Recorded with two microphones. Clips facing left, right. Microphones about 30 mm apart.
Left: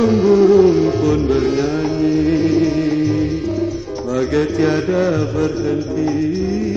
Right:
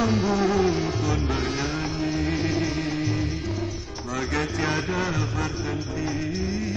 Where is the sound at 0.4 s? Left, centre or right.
Left.